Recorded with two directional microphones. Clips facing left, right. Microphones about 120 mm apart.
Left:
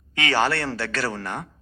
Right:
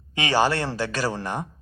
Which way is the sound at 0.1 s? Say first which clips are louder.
Right 1 dB; 15° right (ahead or behind).